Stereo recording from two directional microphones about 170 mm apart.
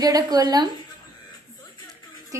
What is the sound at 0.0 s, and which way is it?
Speech, 20° right (ahead or behind).